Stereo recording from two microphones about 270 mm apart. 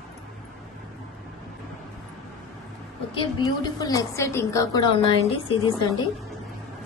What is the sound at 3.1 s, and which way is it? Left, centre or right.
A woman's voice, centre.